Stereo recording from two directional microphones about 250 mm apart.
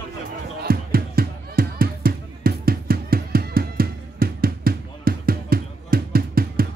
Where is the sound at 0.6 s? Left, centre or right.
Right.